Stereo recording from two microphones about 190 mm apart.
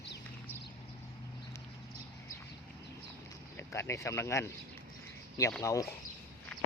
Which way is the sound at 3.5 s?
15° left (ahead or behind).